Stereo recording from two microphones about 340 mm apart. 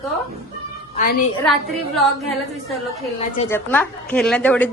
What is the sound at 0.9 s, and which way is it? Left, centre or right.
Speech, left.